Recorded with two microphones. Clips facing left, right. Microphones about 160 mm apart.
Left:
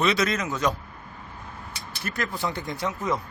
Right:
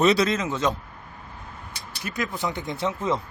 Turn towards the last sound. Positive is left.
turn(degrees=-25)  # may be behind; listen again after turning